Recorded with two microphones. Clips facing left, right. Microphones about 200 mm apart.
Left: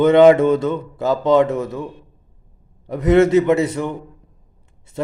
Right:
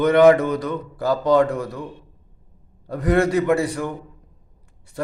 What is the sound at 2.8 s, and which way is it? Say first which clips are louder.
A man's voice: left 5 dB; 20° left (ahead or behind).